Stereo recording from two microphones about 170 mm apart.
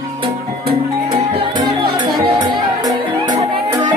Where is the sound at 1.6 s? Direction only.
25° right (ahead or behind).